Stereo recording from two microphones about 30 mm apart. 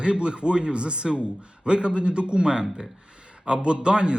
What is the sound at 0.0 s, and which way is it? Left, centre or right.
A man's voice, right.